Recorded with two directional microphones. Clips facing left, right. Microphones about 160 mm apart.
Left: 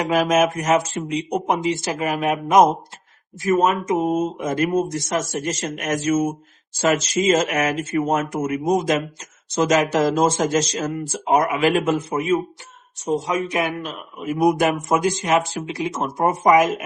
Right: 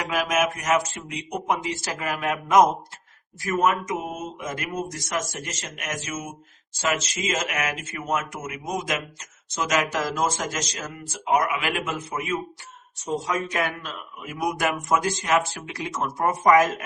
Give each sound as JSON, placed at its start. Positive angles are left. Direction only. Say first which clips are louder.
{"t": 0.0, "sound": "speech", "louder": "left 6 dB", "side_deg": 30}
{"t": 13.1, "sound": "speech", "louder": "left 5 dB", "side_deg": 20}